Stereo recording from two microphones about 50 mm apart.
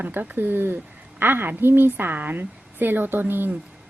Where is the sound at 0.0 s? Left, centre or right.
Right.